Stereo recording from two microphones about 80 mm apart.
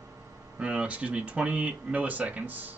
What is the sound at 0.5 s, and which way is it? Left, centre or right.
Speech, centre.